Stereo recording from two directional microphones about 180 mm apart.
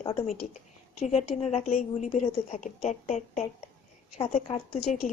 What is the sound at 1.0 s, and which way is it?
A woman's voice, 35° left (ahead or behind).